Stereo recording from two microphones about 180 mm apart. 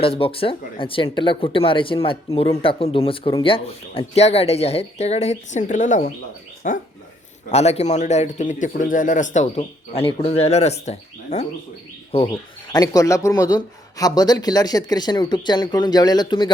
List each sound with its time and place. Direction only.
0.0 s a man's voice: 30° left (ahead or behind); by 6.8 s 45° left (ahead or behind)
7.5 s a man's voice: 35° left (ahead or behind)
12.7 s speech: 20° left (ahead or behind)